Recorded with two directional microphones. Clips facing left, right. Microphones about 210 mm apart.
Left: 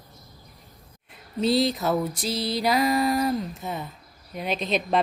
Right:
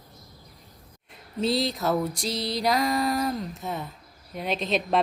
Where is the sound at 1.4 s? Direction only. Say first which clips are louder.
Left 3 dB; centre (ahead or behind).